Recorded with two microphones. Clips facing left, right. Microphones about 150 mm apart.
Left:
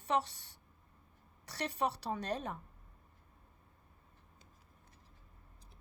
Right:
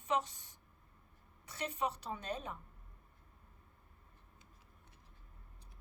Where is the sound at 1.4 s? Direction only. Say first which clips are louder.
Left 2 dB; 35° left (ahead or behind).